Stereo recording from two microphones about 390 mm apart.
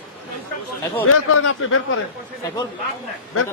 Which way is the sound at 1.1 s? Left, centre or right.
Left.